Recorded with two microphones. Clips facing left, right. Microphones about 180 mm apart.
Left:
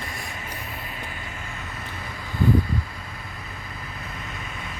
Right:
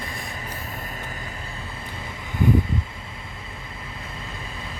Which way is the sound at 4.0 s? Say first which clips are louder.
Even; 30° right (ahead or behind).